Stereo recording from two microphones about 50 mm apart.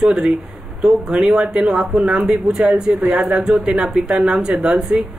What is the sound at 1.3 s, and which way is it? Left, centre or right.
Speech, centre.